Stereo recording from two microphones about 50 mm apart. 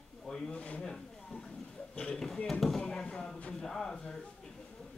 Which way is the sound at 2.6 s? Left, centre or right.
Centre.